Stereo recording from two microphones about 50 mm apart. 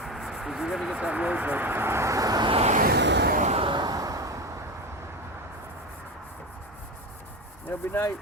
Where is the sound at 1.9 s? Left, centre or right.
Right.